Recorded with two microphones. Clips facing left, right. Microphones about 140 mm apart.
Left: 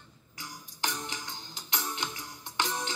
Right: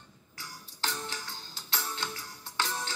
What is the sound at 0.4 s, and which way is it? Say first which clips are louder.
Music: left 1 dB; 20° left (ahead or behind).